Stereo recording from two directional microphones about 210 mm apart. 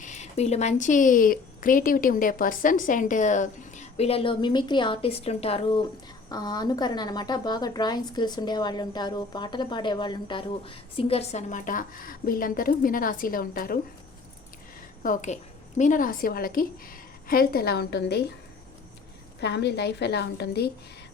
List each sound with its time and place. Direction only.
0.0 s a woman's voice: 35° left (ahead or behind)
15.0 s a woman's voice: 35° left (ahead or behind)
19.4 s a woman's voice: 50° left (ahead or behind)